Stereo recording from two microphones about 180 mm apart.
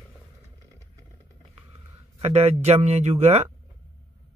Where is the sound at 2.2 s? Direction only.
35° right (ahead or behind).